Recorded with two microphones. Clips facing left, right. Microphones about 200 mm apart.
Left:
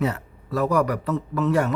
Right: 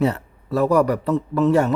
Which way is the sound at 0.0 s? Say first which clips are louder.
Right 5 dB; 30° right (ahead or behind).